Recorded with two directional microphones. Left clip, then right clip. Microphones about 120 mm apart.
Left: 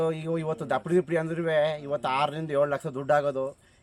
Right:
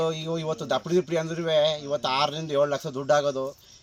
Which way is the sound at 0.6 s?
40° left (ahead or behind).